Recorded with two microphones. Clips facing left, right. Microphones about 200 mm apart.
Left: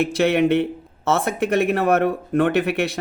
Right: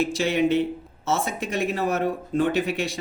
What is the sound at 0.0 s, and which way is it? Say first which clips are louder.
Speech: left 4 dB; 60° left (ahead or behind).